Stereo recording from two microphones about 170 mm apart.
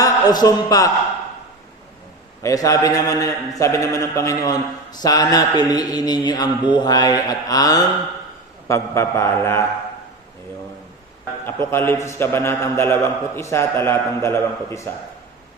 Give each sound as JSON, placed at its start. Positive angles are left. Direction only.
{"t": 0.0, "sound": "speech", "side_deg": 20}
{"t": 2.4, "sound": "a man's voice", "side_deg": 20}
{"t": 11.7, "sound": "a man's voice", "side_deg": 15}